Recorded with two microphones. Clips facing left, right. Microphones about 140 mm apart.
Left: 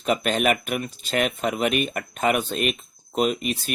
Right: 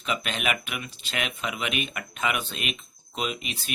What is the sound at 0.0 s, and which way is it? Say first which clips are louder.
Speech: left 8 dB; 45° left (ahead or behind).